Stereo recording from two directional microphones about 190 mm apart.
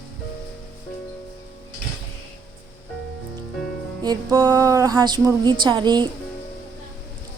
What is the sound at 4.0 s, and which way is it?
Speech, 20° right (ahead or behind).